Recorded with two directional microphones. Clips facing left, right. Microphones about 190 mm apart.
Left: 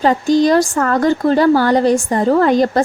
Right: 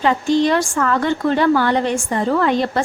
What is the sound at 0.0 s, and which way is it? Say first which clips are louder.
Speech: left 3 dB; 40° left (ahead or behind).